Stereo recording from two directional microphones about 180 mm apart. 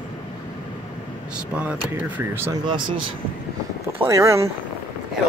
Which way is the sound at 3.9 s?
15° right (ahead or behind).